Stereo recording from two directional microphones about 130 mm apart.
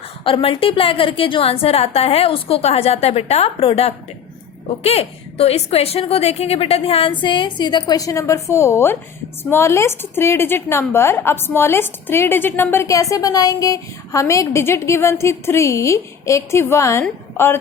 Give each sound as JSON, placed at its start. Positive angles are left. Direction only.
{"t": 0.3, "sound": "a woman's voice", "side_deg": 45}